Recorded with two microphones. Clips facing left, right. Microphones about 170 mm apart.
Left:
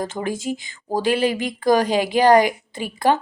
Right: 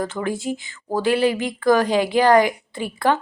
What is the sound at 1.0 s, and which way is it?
A woman's voice, 20° left (ahead or behind).